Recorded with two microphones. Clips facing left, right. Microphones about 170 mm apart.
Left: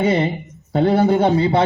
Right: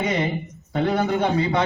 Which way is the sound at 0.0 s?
30° left (ahead or behind).